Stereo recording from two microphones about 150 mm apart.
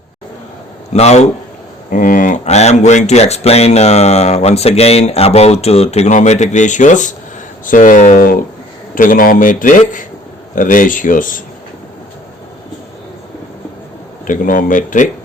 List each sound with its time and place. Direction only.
0.9 s speech: 45° left (ahead or behind)
1.9 s speech: 65° left (ahead or behind)
14.3 s speech: 60° left (ahead or behind)